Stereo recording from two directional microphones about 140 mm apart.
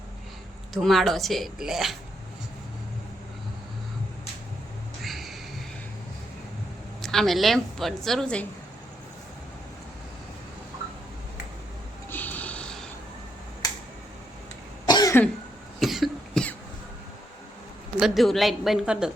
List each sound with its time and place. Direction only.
0.7 s a woman's voice: centre (ahead or behind)
5.0 s music: centre (ahead or behind)
7.0 s a woman's voice: centre (ahead or behind)
12.1 s snort: 10° left (ahead or behind)
14.8 s cough: 30° left (ahead or behind)
15.8 s cough: centre (ahead or behind)
18.0 s a woman's voice: centre (ahead or behind)